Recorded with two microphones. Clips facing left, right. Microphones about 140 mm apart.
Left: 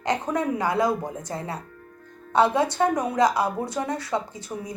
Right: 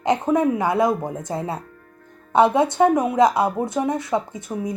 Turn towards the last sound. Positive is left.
turn(degrees=-25)  # may be behind; listen again after turning